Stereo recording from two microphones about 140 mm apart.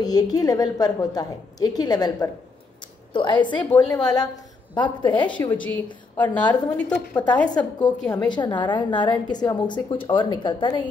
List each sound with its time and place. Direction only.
0.0 s a woman's voice: 30° left (ahead or behind)
5.4 s a woman's voice: 15° left (ahead or behind)
6.8 s a woman's voice: 10° left (ahead or behind)
7.4 s a woman's voice: 30° left (ahead or behind)